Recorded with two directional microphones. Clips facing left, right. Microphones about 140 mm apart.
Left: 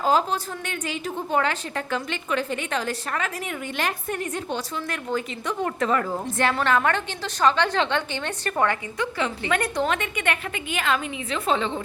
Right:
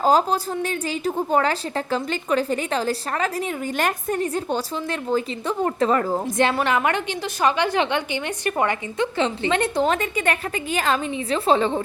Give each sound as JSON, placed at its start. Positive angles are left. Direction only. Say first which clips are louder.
{"t": 0.0, "sound": "a woman's voice", "louder": "right 3 dB", "side_deg": -35}
{"t": 6.3, "sound": "a woman's voice", "louder": "even", "side_deg": -20}